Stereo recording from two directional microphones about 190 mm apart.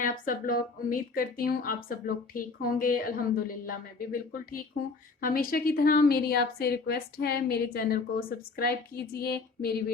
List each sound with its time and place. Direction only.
0.0 s speech: 45° left (ahead or behind)